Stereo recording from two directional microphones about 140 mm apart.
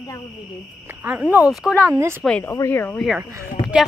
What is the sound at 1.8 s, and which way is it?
Speech, 20° right (ahead or behind).